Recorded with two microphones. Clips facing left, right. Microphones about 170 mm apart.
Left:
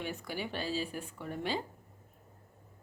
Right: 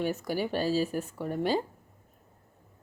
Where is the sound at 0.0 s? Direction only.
40° right (ahead or behind).